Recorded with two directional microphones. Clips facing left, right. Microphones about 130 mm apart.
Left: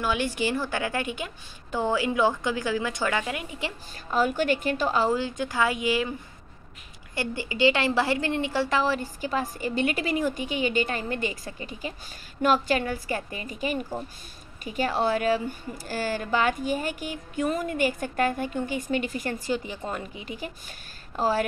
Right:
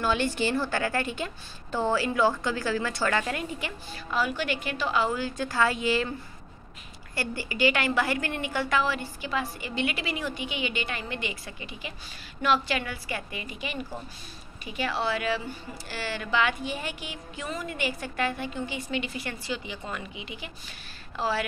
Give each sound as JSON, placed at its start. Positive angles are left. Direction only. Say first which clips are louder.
{"t": 0.0, "sound": "a woman's voice", "louder": "even", "side_deg": 10}
{"t": 3.9, "sound": "a woman's voice", "louder": "left 4 dB", "side_deg": 45}
{"t": 5.2, "sound": "a woman's voice", "louder": "even", "side_deg": 15}
{"t": 7.2, "sound": "a woman's voice", "louder": "left 2 dB", "side_deg": 20}